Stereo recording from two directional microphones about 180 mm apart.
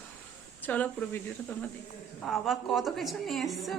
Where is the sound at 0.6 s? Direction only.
10° left (ahead or behind).